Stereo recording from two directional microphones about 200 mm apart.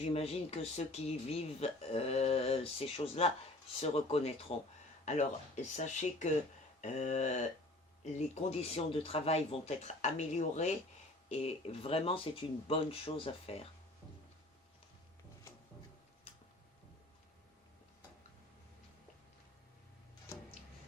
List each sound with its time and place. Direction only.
0.0 s speech: 30° left (ahead or behind)